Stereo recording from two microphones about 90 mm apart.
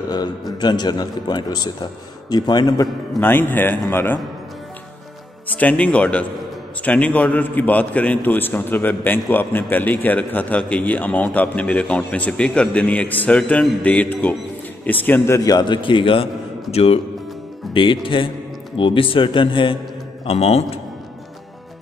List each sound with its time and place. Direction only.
0.1 s a man's voice: 50° left (ahead or behind)
3.2 s speech: 25° left (ahead or behind)
5.5 s a man's voice: 15° left (ahead or behind)
15.5 s speech: 60° left (ahead or behind)
16.7 s a man's voice: 90° left
17.7 s speech: 70° left (ahead or behind)